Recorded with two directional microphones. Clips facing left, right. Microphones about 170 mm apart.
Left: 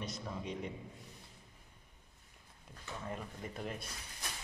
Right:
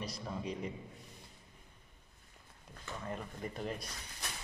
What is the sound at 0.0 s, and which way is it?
Speech, centre (ahead or behind).